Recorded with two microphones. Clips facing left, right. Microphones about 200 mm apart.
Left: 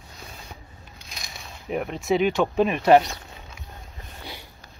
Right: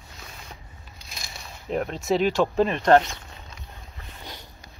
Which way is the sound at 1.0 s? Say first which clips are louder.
Even; centre (ahead or behind).